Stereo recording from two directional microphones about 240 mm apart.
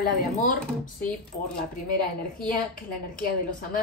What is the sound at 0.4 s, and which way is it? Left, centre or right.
Speech, left.